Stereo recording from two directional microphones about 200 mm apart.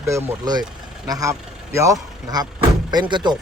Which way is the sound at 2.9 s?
20° right (ahead or behind).